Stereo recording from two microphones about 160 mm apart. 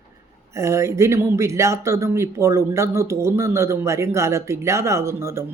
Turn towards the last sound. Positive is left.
turn(degrees=-15)  # may be behind; listen again after turning